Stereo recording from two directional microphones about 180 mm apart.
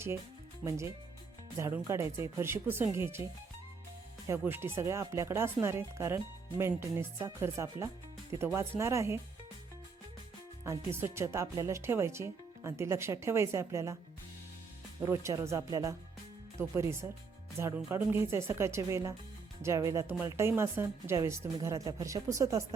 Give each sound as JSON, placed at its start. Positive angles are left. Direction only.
{"t": 0.6, "sound": "speech", "side_deg": -15}
{"t": 4.3, "sound": "speech", "side_deg": -10}
{"t": 10.6, "sound": "speech", "side_deg": -15}
{"t": 15.0, "sound": "speech", "side_deg": -15}